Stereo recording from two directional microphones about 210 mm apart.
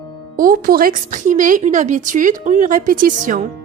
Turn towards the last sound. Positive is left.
turn(degrees=-40)  # may be behind; listen again after turning